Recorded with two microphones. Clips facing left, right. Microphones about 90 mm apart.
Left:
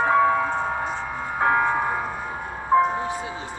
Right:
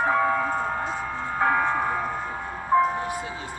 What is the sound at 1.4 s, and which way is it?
Music, 15° left (ahead or behind).